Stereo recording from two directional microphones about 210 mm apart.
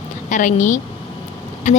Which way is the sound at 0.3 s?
35° left (ahead or behind).